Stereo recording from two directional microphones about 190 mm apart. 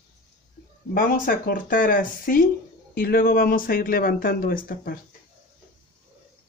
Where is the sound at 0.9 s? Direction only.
45° left (ahead or behind).